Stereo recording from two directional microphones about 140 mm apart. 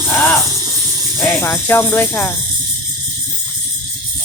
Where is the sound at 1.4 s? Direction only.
15° left (ahead or behind).